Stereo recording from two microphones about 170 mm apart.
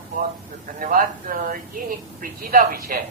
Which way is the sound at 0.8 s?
55° right (ahead or behind).